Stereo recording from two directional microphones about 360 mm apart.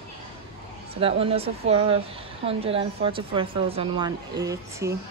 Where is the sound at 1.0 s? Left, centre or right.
Centre.